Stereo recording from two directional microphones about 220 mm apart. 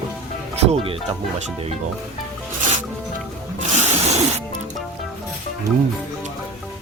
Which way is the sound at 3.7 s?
30° right (ahead or behind).